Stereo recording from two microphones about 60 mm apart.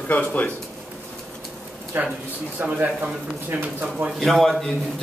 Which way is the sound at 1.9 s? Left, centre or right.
Right.